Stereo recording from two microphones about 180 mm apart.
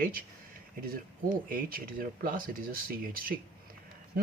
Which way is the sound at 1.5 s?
50° right (ahead or behind).